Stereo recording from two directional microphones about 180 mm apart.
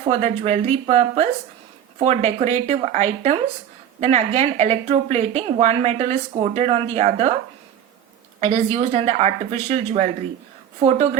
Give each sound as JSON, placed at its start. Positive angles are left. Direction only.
{"t": 0.1, "sound": "speech", "side_deg": -40}
{"t": 8.4, "sound": "speech", "side_deg": -35}